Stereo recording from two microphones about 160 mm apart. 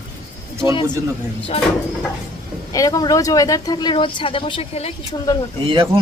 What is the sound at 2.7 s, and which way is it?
Speech, 20° left (ahead or behind).